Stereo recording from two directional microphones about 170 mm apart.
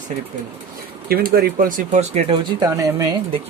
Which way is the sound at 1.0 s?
60° right (ahead or behind).